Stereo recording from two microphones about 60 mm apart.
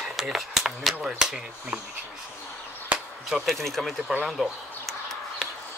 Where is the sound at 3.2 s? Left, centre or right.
Centre.